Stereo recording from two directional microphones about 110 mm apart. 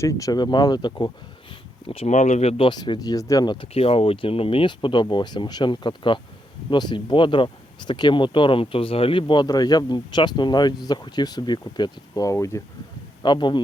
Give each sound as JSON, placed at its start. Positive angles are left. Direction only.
{"t": 0.0, "sound": "speech", "side_deg": 30}
{"t": 1.9, "sound": "speech", "side_deg": 80}
{"t": 2.6, "sound": "speech", "side_deg": 45}
{"t": 3.8, "sound": "speech", "side_deg": 60}
{"t": 13.2, "sound": "speech", "side_deg": 45}